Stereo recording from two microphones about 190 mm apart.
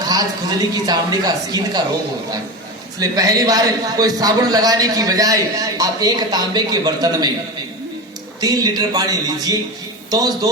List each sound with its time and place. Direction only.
0.0 s a man's voice: 20° right (ahead or behind)
3.0 s a man's voice: 20° right (ahead or behind)
8.4 s a man's voice: 20° right (ahead or behind)